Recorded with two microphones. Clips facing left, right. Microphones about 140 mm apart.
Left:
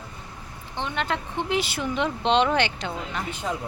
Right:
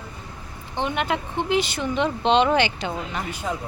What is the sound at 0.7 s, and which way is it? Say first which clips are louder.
Speech: right 3 dB; 15° right (ahead or behind).